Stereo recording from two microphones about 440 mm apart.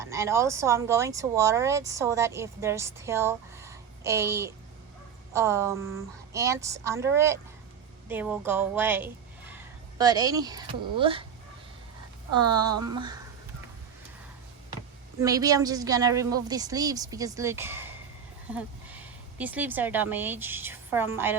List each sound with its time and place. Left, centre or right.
0.0 s a woman's voice: centre
12.3 s speech: right
12.8 s speech: centre
15.2 s speech: centre